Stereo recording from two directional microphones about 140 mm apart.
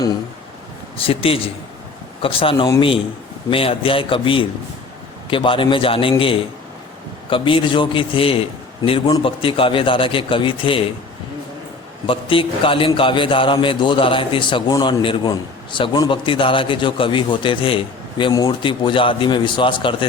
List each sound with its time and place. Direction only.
0.9 s a man's voice: 40° left (ahead or behind)
12.0 s a man's voice: 40° left (ahead or behind)